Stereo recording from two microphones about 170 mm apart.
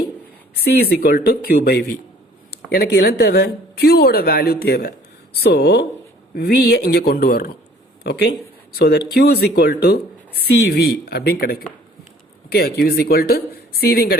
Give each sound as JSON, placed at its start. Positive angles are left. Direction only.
{"t": 0.5, "sound": "speech", "side_deg": 70}
{"t": 8.0, "sound": "speech", "side_deg": 75}